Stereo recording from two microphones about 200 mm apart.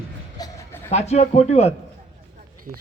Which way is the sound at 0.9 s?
35° left (ahead or behind).